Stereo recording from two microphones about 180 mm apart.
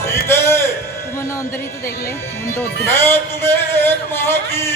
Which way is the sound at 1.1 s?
15° left (ahead or behind).